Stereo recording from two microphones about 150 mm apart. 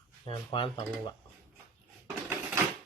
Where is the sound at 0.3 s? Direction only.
35° left (ahead or behind).